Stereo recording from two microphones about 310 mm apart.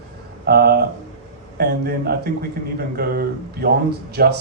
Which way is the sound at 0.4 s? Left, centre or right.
Right.